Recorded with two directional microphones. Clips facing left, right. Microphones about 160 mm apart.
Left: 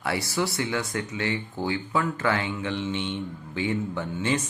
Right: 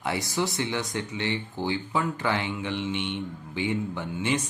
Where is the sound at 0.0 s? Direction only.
20° right (ahead or behind).